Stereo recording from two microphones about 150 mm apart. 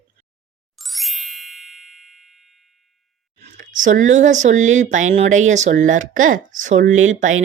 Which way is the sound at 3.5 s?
60° right (ahead or behind).